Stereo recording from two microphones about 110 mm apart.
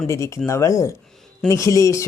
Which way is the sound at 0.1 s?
25° left (ahead or behind).